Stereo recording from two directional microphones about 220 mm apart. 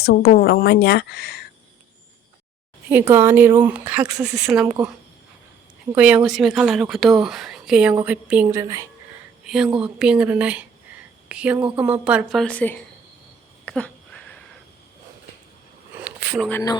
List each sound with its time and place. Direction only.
0.0 s a woman's voice: 45° left (ahead or behind)
2.9 s speech: 10° right (ahead or behind)
4.6 s speech: 15° right (ahead or behind)
5.9 s speech: 5° right (ahead or behind)
9.4 s a sound: 5° right (ahead or behind)
9.7 s a woman's voice: 5° right (ahead or behind)
13.7 s a sound: 5° left (ahead or behind)
16.0 s a sound: 5° right (ahead or behind)
16.5 s speech: 10° left (ahead or behind)